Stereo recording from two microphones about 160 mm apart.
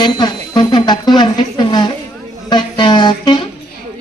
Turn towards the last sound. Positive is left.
turn(degrees=30)  # may be behind; listen again after turning